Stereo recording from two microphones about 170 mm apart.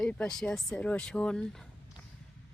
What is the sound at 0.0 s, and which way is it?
Speech, 5° left (ahead or behind).